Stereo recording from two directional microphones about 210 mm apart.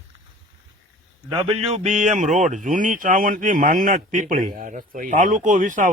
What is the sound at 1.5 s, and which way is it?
Speech, 30° right (ahead or behind).